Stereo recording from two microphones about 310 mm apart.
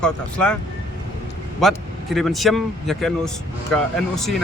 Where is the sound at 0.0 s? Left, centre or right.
Centre.